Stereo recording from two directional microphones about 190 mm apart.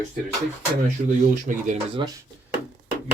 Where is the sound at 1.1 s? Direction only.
40° right (ahead or behind).